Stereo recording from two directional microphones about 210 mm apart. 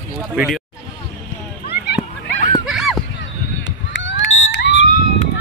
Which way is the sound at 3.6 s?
60° left (ahead or behind).